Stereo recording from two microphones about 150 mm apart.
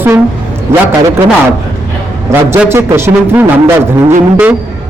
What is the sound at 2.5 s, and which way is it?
Speech, 15° right (ahead or behind).